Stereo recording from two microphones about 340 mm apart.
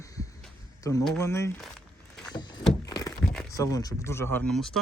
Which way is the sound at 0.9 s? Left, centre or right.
Centre.